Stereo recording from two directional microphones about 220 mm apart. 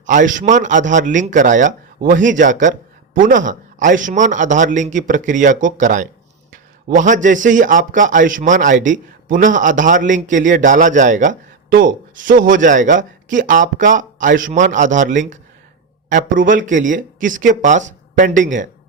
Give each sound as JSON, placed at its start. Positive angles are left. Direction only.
{"t": 0.0, "sound": "a man's voice", "side_deg": -35}